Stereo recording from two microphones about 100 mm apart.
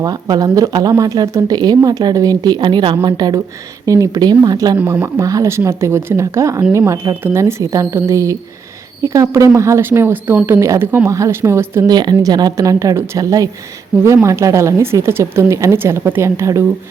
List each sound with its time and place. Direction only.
0.0 s a woman's voice: 40° right (ahead or behind)
4.8 s speech: 15° right (ahead or behind)
5.0 s a woman's voice: 30° right (ahead or behind)
7.2 s a woman's voice: 20° right (ahead or behind)
7.6 s a woman's voice: 35° right (ahead or behind)
11.9 s a woman's voice: 45° right (ahead or behind)